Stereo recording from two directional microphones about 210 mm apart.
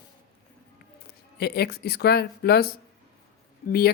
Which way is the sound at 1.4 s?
50° left (ahead or behind).